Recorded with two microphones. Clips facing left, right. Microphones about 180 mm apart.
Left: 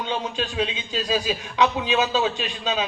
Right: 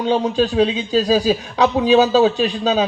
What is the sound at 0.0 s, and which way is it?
Speech, 35° right (ahead or behind).